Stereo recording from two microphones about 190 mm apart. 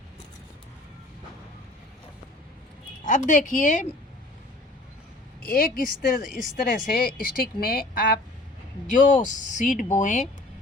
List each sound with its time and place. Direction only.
3.0 s speech: 40° left (ahead or behind)
5.4 s a woman's voice: 50° left (ahead or behind)